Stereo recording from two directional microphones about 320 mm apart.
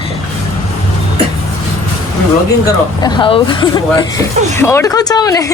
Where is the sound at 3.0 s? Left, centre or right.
Centre.